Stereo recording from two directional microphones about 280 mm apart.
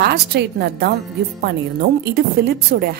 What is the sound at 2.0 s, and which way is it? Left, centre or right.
Speech, right.